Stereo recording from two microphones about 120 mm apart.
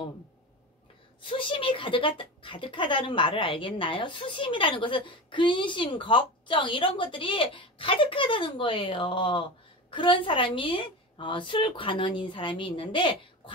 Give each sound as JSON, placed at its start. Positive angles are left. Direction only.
{"t": 1.2, "sound": "speech", "side_deg": 45}